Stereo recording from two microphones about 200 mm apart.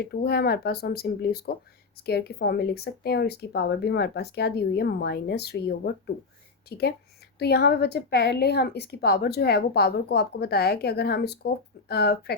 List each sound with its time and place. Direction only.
0.0 s a woman's voice: 50° left (ahead or behind)